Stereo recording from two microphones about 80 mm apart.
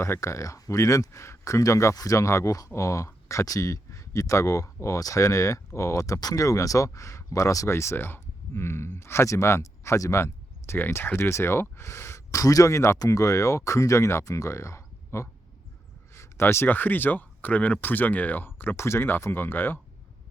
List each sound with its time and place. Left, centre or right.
0.0 s speech: left